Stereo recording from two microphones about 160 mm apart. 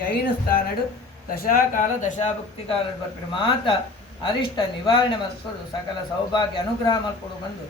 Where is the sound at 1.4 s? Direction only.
60° left (ahead or behind).